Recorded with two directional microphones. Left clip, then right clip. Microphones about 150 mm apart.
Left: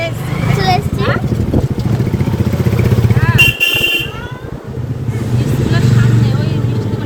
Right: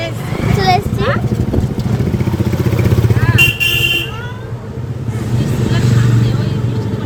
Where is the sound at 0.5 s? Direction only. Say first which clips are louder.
Right 2 dB; 25° right (ahead or behind).